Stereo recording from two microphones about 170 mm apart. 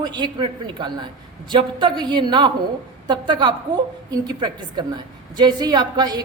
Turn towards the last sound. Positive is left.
turn(degrees=-25)  # may be behind; listen again after turning